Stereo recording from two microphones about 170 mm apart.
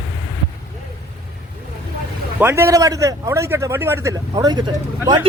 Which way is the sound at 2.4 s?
15° right (ahead or behind).